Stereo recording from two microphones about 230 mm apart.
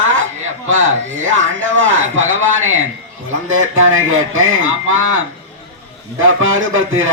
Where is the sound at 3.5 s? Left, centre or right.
Right.